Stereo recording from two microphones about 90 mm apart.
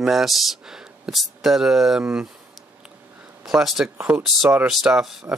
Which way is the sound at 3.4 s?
Centre (ahead or behind).